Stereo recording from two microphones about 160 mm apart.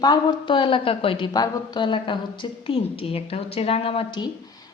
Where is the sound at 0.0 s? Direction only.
25° left (ahead or behind).